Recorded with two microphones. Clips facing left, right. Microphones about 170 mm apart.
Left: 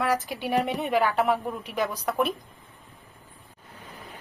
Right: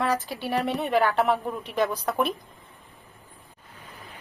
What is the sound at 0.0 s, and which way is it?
A woman's voice, 10° left (ahead or behind).